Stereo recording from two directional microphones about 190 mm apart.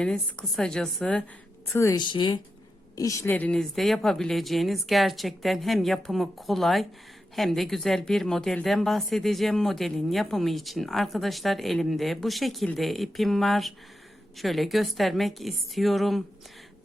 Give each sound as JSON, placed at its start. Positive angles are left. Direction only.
{"t": 0.0, "sound": "speech", "side_deg": 5}
{"t": 1.7, "sound": "speech", "side_deg": 15}